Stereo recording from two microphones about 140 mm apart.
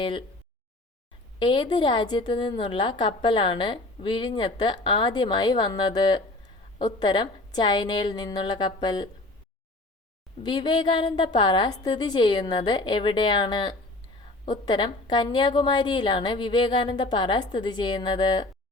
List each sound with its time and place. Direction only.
0.0 s a woman's voice: 35° left (ahead or behind)
1.4 s a woman's voice: 35° left (ahead or behind)
10.4 s a woman's voice: 30° left (ahead or behind)